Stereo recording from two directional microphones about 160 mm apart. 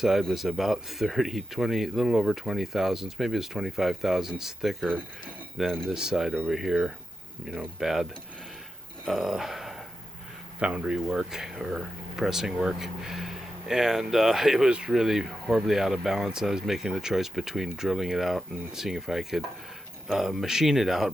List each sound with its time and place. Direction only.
0.0 s speech: centre (ahead or behind)
9.0 s a sound: centre (ahead or behind)
10.6 s speech: 5° right (ahead or behind)